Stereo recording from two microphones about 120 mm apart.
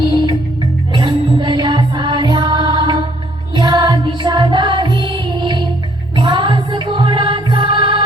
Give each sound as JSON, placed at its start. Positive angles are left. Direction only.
{"t": 0.1, "sound": "music", "side_deg": -40}